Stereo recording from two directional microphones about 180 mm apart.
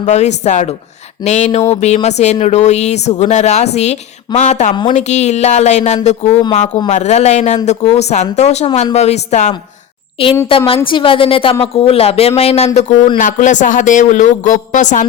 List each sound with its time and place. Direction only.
0.0 s a woman's voice: 40° left (ahead or behind)